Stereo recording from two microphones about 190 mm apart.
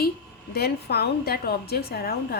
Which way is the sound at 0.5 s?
55° left (ahead or behind).